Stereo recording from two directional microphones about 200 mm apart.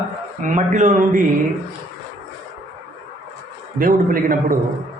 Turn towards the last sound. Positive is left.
turn(degrees=-45)  # may be behind; listen again after turning